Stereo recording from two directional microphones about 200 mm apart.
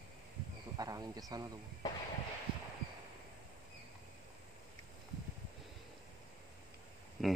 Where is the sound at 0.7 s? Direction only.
20° right (ahead or behind).